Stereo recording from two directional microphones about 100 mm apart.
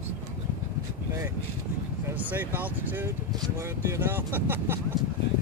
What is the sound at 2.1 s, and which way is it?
Speech, 20° right (ahead or behind).